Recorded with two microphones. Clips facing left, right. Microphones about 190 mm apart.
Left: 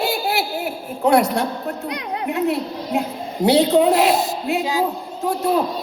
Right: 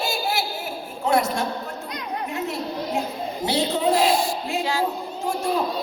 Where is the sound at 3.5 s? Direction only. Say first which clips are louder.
Left 8 dB; 65° left (ahead or behind).